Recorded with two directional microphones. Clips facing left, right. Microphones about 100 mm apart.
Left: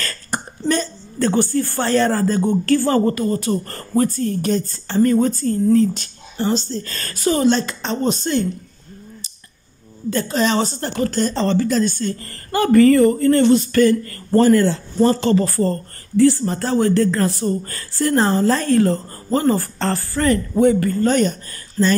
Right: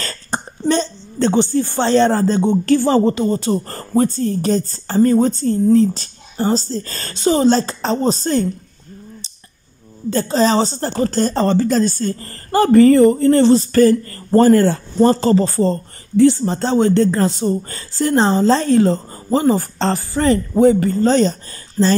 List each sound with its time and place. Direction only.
0.0 s speech: 25° right (ahead or behind)
10.0 s speech: 30° right (ahead or behind)
15.4 s speech: 20° right (ahead or behind)